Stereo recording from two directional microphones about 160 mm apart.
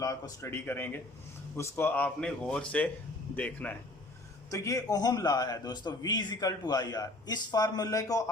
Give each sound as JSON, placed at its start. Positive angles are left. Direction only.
{"t": 0.0, "sound": "speech", "side_deg": 20}
{"t": 4.5, "sound": "a man's voice", "side_deg": 20}